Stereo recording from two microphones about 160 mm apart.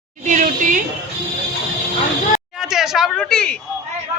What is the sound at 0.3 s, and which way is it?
Speech, 55° right (ahead or behind).